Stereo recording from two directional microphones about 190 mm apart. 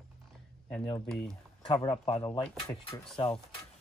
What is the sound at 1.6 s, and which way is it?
Speech, 20° left (ahead or behind).